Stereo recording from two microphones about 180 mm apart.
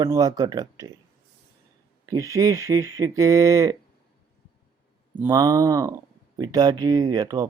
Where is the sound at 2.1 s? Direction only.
20° right (ahead or behind).